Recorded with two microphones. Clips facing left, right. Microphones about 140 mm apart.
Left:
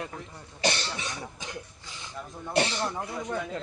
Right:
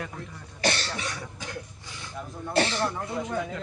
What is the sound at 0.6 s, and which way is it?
Cough, 20° left (ahead or behind).